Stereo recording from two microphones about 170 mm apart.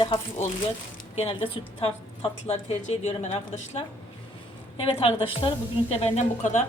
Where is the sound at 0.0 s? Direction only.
30° left (ahead or behind).